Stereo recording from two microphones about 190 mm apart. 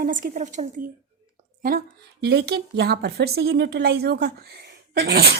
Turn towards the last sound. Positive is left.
turn(degrees=-55)  # may be behind; listen again after turning